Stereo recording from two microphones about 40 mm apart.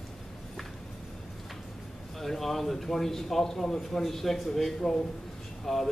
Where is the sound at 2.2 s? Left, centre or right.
Centre.